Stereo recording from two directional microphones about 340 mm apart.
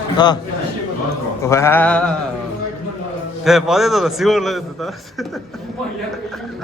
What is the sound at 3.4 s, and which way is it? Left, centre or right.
A man's voice, centre.